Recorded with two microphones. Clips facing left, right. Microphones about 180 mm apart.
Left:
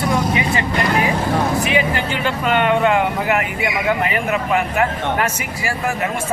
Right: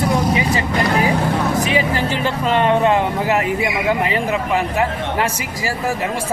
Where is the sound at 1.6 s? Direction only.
35° right (ahead or behind).